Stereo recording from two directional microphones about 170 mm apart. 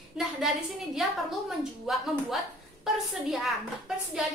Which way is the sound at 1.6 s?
Centre (ahead or behind).